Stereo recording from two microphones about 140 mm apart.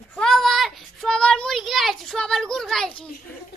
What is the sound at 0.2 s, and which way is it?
Child singing, centre (ahead or behind).